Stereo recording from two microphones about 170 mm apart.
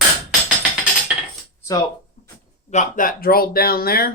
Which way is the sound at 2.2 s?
45° left (ahead or behind).